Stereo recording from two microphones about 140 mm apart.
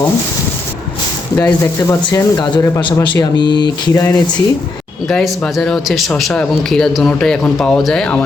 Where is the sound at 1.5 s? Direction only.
20° left (ahead or behind).